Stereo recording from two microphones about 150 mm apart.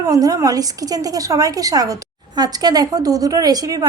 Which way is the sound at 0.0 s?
25° right (ahead or behind).